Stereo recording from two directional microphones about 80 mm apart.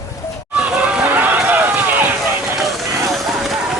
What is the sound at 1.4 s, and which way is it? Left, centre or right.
Run, right.